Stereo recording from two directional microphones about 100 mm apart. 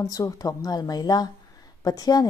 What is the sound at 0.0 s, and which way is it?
A woman's voice, 35° left (ahead or behind).